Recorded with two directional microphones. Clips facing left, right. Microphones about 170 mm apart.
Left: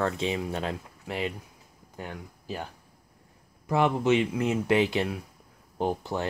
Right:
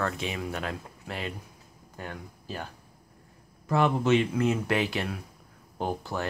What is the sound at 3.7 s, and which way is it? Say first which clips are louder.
Speech: even; 15° left (ahead or behind).